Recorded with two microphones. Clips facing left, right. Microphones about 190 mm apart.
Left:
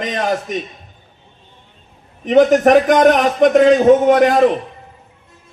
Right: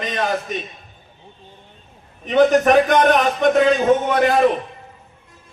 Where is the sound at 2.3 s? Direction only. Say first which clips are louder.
Left 3 dB; 45° left (ahead or behind).